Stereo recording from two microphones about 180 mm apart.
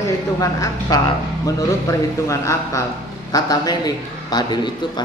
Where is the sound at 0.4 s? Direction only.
20° left (ahead or behind).